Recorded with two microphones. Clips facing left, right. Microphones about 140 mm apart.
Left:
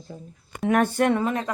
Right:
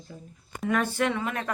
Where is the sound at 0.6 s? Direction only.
60° left (ahead or behind).